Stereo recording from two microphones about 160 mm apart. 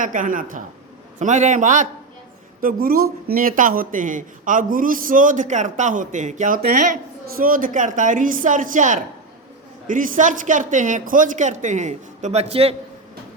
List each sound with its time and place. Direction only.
0.0 s speech: 55° right (ahead or behind)
2.6 s speech: 65° right (ahead or behind); by 12.7 s 40° right (ahead or behind)